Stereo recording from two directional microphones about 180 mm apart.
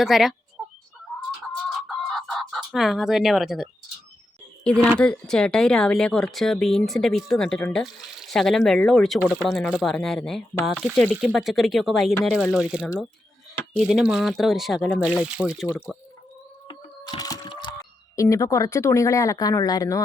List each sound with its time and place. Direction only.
0.0 s speech: centre (ahead or behind)
1.9 s chicken: centre (ahead or behind)
4.6 s speech: 5° left (ahead or behind)
16.6 s music: 25° left (ahead or behind)
18.2 s speech: 20° left (ahead or behind)